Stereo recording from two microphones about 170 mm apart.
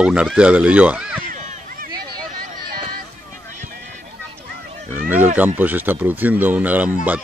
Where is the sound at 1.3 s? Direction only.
55° right (ahead or behind).